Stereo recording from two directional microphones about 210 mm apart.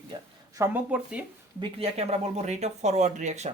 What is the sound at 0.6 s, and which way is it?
Speech, 10° right (ahead or behind).